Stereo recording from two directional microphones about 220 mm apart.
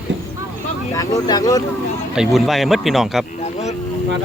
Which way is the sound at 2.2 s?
Centre (ahead or behind).